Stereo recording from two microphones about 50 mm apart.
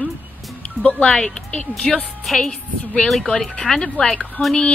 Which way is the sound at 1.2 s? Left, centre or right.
Centre.